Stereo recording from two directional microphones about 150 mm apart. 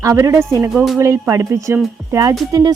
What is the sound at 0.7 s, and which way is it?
Speech, centre (ahead or behind).